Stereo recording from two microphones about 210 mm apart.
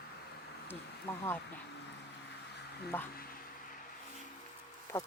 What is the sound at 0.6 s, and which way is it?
Speech, 10° left (ahead or behind).